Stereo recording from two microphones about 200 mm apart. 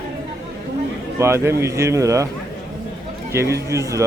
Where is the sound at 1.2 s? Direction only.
15° right (ahead or behind).